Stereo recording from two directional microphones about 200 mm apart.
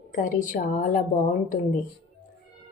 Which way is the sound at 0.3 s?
40° left (ahead or behind).